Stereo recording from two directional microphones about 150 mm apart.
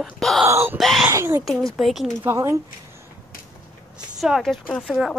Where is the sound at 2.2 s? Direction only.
20° right (ahead or behind).